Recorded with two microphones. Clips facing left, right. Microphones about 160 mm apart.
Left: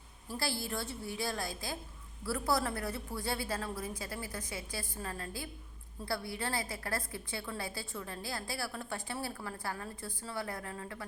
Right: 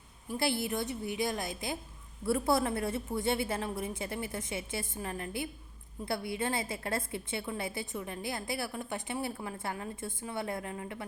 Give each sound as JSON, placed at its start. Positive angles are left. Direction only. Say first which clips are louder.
{"t": 0.3, "sound": "a woman's voice", "louder": "right 5 dB", "side_deg": -20}